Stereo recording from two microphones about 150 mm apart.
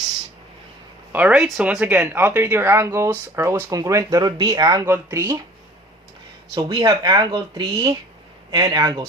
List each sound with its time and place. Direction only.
1.1 s speech: 10° right (ahead or behind)
6.5 s speech: 30° right (ahead or behind)